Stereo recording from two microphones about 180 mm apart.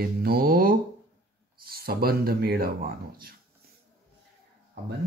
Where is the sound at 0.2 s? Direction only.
55° right (ahead or behind).